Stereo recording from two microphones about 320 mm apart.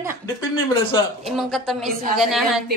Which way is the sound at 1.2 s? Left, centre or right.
Centre.